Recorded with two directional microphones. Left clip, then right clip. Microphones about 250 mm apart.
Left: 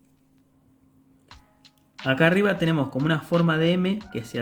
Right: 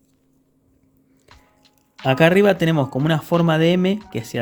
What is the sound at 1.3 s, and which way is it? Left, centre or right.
Music, centre.